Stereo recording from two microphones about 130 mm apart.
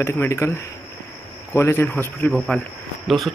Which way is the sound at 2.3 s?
5° left (ahead or behind).